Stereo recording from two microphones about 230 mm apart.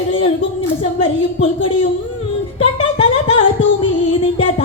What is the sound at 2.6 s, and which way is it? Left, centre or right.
Music, left.